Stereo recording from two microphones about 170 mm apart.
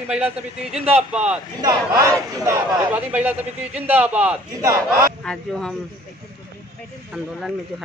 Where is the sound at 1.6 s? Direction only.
20° right (ahead or behind).